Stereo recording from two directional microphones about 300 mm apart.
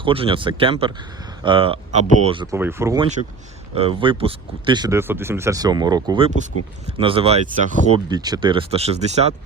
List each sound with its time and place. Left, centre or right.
0.0 s speech: centre